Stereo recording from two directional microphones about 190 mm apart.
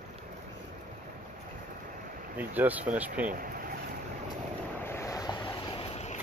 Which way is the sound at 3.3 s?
50° right (ahead or behind).